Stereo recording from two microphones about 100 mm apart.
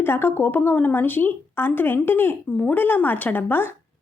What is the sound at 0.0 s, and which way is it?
A woman's voice, 20° left (ahead or behind).